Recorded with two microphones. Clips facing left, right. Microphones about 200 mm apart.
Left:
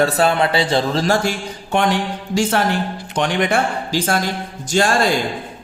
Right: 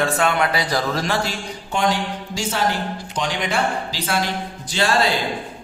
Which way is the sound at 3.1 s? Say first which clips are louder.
Left 7 dB; 60° left (ahead or behind).